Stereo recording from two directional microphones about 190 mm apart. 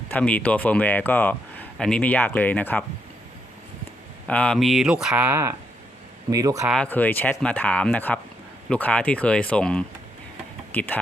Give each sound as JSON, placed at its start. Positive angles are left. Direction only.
{"t": 0.1, "sound": "speech", "side_deg": 10}
{"t": 4.3, "sound": "speech", "side_deg": 5}
{"t": 6.7, "sound": "speech", "side_deg": 5}